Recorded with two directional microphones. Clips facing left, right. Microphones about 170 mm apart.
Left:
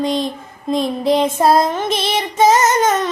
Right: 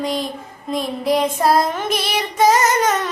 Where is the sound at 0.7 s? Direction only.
25° left (ahead or behind).